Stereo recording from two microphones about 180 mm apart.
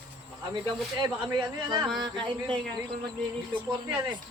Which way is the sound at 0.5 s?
20° right (ahead or behind).